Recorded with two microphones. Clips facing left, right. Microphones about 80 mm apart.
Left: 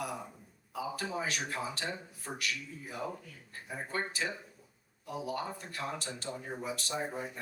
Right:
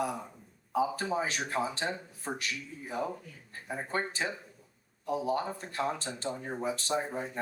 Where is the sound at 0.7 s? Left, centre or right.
Right.